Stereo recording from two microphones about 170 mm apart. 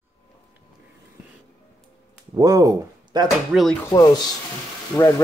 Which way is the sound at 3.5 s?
Centre (ahead or behind).